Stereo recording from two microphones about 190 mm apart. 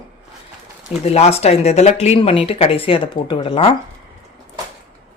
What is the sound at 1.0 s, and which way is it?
Speech, 35° left (ahead or behind).